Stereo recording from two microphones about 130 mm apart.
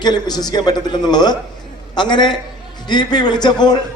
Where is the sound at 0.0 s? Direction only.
35° left (ahead or behind).